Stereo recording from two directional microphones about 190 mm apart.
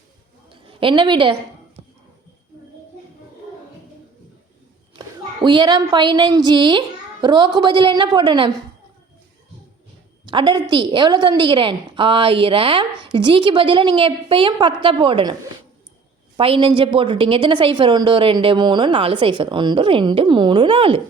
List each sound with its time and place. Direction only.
0.7 s a woman's voice: 25° right (ahead or behind)
4.9 s a woman's voice: 25° right (ahead or behind)
10.2 s a woman's voice: 25° right (ahead or behind)
16.4 s a woman's voice: 30° right (ahead or behind)